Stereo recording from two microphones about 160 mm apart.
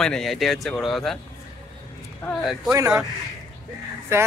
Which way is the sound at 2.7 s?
20° right (ahead or behind).